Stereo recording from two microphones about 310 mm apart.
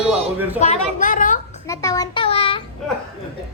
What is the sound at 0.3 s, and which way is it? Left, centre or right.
Speech, centre.